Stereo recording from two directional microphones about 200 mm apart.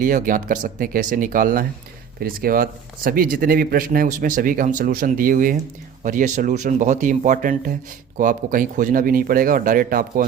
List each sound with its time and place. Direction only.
0.0 s speech: 40° right (ahead or behind)